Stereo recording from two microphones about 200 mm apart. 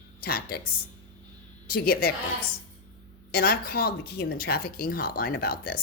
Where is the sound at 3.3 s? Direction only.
50° left (ahead or behind).